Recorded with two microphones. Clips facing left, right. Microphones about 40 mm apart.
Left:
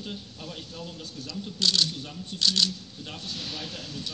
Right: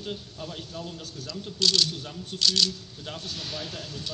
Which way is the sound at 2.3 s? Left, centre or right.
Centre.